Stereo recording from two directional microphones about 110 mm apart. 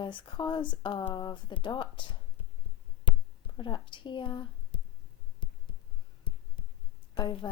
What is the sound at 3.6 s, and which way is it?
Speech, 45° left (ahead or behind).